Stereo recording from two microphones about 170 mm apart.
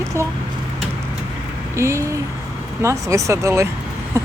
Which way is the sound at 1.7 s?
15° right (ahead or behind).